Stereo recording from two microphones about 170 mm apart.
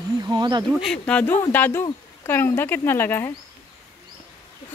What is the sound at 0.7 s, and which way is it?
Speech, centre (ahead or behind).